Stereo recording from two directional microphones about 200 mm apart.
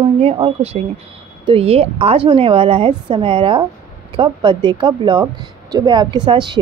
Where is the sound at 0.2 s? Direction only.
30° right (ahead or behind).